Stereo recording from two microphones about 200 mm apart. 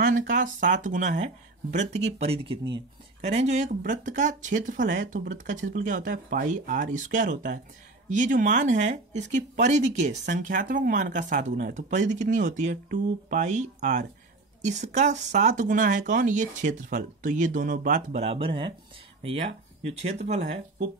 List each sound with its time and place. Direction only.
0.0 s speech: 40° right (ahead or behind)